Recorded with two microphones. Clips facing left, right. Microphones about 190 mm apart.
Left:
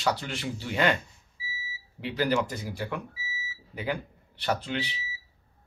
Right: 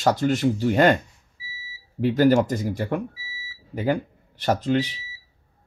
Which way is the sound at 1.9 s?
45° right (ahead or behind).